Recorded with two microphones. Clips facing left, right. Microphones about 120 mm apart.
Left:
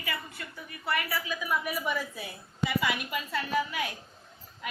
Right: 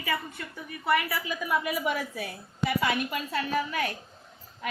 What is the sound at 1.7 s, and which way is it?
Speech, 75° right (ahead or behind).